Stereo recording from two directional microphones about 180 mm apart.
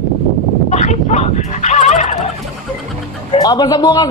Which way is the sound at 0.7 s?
40° left (ahead or behind).